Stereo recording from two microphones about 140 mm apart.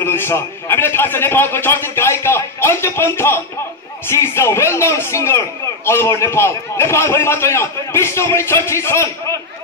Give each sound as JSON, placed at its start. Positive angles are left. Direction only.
{"t": 0.0, "sound": "a man's voice", "side_deg": 15}